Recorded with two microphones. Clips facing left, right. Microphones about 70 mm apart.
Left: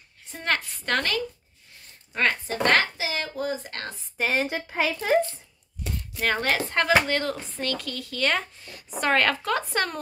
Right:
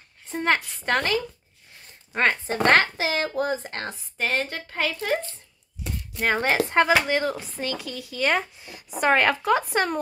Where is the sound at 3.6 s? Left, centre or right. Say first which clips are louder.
Right 3 dB; right.